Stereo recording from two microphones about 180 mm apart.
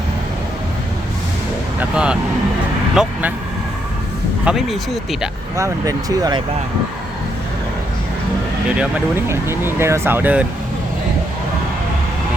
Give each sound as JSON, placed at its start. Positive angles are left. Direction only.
{"t": 1.8, "sound": "speech", "side_deg": -5}
{"t": 4.4, "sound": "speech", "side_deg": 0}
{"t": 5.5, "sound": "speech", "side_deg": -20}
{"t": 8.8, "sound": "speech", "side_deg": -15}